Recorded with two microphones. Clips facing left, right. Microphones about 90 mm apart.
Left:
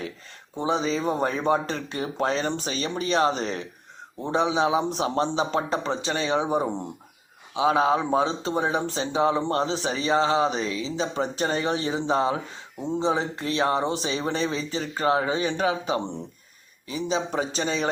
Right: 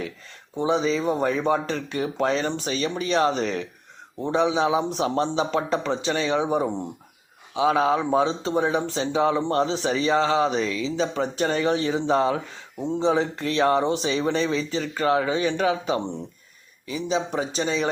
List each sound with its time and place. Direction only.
0.6 s speech: 35° left (ahead or behind)